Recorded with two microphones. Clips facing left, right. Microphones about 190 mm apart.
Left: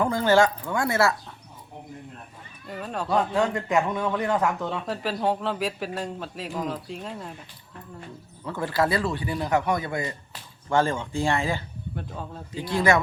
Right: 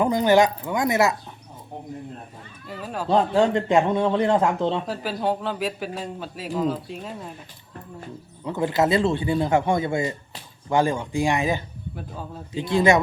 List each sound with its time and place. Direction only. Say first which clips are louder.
0.0 s speech: right 2 dB; 20° right (ahead or behind)
2.6 s speech: right 1 dB; 5° right (ahead or behind)
3.1 s a man's voice: right 5 dB; 30° right (ahead or behind)
4.9 s speech: right 1 dB; centre (ahead or behind)
8.4 s a man's voice: right 4 dB; 20° right (ahead or behind)
11.9 s speech: even; centre (ahead or behind)
12.5 s a man's voice: right 4 dB; 20° right (ahead or behind)